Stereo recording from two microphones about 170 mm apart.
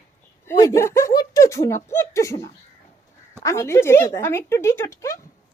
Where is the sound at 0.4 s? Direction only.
15° left (ahead or behind).